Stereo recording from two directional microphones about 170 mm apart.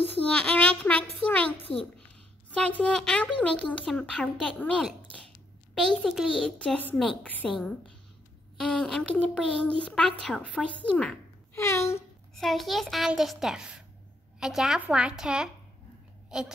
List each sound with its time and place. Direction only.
0.0 s child singing: 10° left (ahead or behind)
1.7 s a child's voice: 5° left (ahead or behind)
11.5 s speech: 15° left (ahead or behind)
12.4 s speech: centre (ahead or behind)